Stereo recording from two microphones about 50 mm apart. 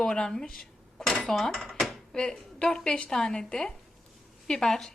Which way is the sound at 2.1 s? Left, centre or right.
Centre.